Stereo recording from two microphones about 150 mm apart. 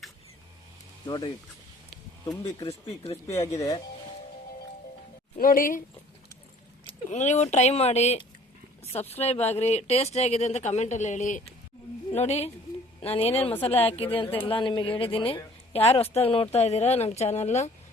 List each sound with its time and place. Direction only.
1.0 s speech: 30° left (ahead or behind)
2.6 s a woman's voice: 40° left (ahead or behind)
3.4 s speech: 20° left (ahead or behind)
5.4 s speech: 65° left (ahead or behind)
7.1 s a woman's voice: 50° left (ahead or behind)
8.8 s a sound: 45° left (ahead or behind)
9.1 s a woman's voice: 45° left (ahead or behind)